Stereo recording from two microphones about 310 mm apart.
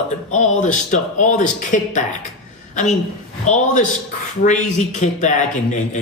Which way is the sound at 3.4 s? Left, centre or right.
Left.